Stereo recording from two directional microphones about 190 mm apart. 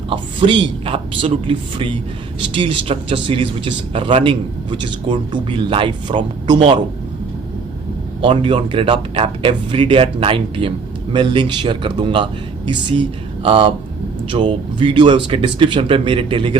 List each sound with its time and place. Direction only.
0.1 s speech: 25° right (ahead or behind)
8.2 s speech: 25° right (ahead or behind)